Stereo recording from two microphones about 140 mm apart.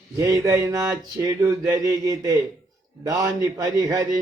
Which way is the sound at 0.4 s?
25° right (ahead or behind).